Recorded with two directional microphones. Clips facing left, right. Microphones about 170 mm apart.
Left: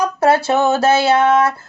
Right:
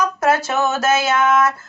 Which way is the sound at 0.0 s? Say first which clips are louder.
Left 3 dB; 30° left (ahead or behind).